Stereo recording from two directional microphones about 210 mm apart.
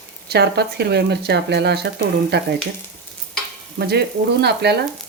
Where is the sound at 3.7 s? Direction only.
50° right (ahead or behind).